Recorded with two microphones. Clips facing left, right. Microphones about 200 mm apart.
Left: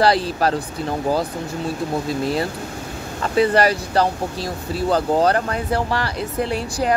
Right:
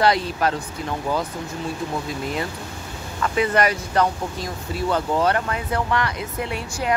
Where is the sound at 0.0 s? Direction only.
35° left (ahead or behind).